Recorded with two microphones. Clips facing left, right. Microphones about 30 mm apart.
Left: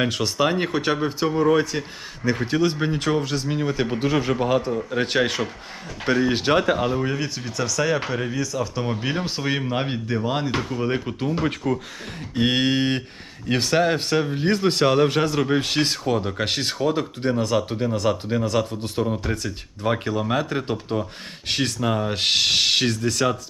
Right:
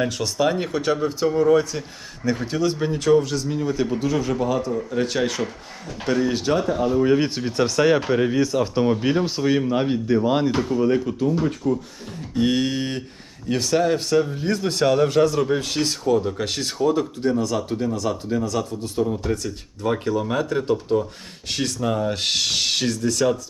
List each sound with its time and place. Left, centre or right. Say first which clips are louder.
0.0 s speech: even; left
7.2 s speech: right 6 dB; right
8.1 s speech: right 6 dB; centre
8.4 s speech: right 5 dB; right
8.8 s speech: right 7 dB; centre
10.5 s speech: right 4 dB; left
11.3 s speech: right 1 dB; left
12.3 s speech: left 1 dB; left
17.9 s speech: left 1 dB; left
19.0 s speech: right 1 dB; left